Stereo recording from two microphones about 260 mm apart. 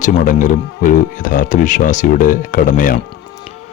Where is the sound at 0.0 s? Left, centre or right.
Left.